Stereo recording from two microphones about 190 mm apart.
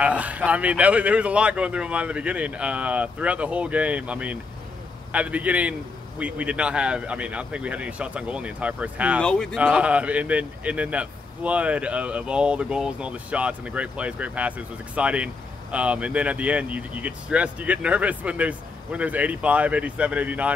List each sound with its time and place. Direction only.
0.0 s speech: 5° right (ahead or behind)
9.2 s speech: 5° left (ahead or behind)
9.6 s speech: 5° right (ahead or behind)